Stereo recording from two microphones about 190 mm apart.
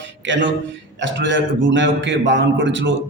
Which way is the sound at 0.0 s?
75° right (ahead or behind).